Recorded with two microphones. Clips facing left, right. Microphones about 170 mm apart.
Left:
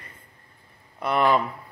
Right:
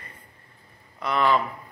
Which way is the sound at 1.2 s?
20° left (ahead or behind).